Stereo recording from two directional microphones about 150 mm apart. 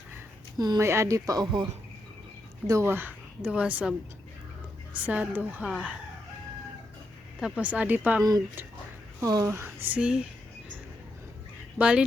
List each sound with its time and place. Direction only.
0.5 s speech: 25° right (ahead or behind)
2.6 s a woman's voice: 20° right (ahead or behind)
4.9 s a woman's voice: 10° right (ahead or behind)
7.3 s a woman's voice: 5° right (ahead or behind)
8.2 s a woman's voice: 25° right (ahead or behind); by 10.2 s 5° right (ahead or behind)
11.8 s a woman's voice: 10° right (ahead or behind)